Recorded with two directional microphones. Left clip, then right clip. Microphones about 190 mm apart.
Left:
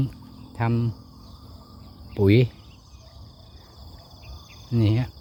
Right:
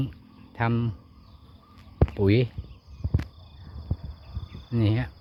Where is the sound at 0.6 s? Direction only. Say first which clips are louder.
Even; 5° right (ahead or behind).